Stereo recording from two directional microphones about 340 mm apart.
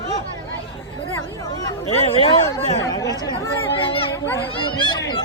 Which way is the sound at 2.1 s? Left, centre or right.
Centre.